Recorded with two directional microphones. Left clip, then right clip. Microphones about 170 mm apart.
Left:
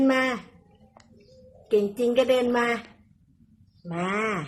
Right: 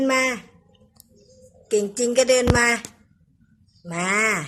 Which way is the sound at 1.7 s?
10° right (ahead or behind).